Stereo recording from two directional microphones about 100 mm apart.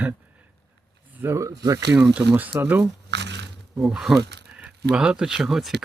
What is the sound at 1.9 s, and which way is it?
Speech, 15° right (ahead or behind).